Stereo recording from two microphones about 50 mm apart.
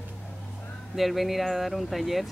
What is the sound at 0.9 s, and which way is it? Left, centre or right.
Speech, centre.